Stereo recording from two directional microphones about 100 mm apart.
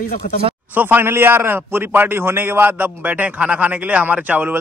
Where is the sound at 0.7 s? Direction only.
20° right (ahead or behind).